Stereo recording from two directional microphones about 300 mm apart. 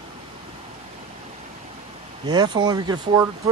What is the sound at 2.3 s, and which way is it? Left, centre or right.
Speech, centre.